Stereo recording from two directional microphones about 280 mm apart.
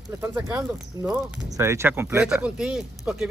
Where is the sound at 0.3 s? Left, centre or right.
Centre.